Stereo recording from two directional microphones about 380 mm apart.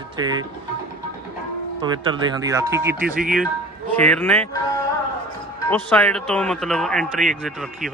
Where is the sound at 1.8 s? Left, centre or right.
Centre.